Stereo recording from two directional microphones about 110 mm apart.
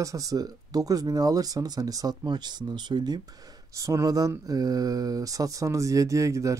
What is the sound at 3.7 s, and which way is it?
Speech, 30° right (ahead or behind).